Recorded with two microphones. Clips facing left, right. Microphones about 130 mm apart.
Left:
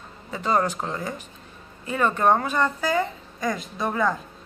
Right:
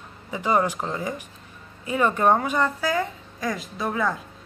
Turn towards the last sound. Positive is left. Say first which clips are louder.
# left 1 dB
turn(degrees=0)  # may be behind; listen again after turning